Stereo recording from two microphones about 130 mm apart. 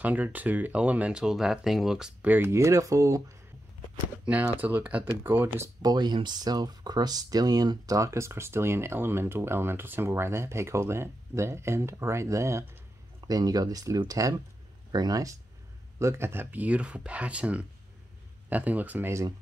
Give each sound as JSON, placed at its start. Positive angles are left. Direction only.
{"t": 0.0, "sound": "speech", "side_deg": -10}
{"t": 4.6, "sound": "speech", "side_deg": -15}
{"t": 5.8, "sound": "speech", "side_deg": -30}